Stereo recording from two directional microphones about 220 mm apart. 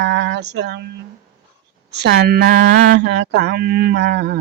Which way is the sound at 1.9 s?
50° right (ahead or behind).